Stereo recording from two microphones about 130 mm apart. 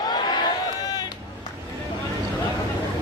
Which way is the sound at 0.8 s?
30° left (ahead or behind).